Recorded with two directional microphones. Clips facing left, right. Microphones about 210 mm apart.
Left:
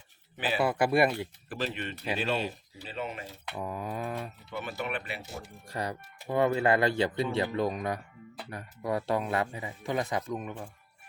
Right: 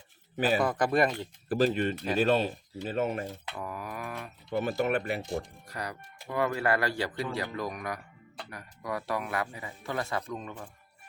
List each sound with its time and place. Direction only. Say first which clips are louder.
0.3 s a man's voice: right 5 dB; 45° right (ahead or behind)
0.6 s speech: left 5 dB; 10° left (ahead or behind)
1.5 s speech: right 11 dB; 40° right (ahead or behind)
3.5 s speech: left 3 dB; 20° left (ahead or behind)
4.4 s speech: right 10 dB; 40° right (ahead or behind)
5.6 s speech: left 4 dB; 30° left (ahead or behind)